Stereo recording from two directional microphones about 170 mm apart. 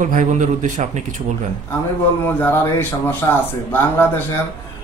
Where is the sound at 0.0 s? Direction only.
50° right (ahead or behind).